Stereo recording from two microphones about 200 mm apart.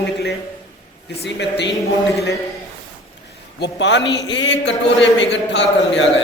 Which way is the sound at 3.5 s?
60° left (ahead or behind).